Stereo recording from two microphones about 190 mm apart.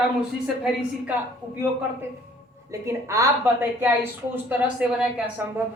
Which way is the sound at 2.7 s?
15° right (ahead or behind).